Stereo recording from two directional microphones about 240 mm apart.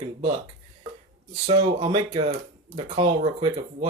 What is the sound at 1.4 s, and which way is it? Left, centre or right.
Speech, right.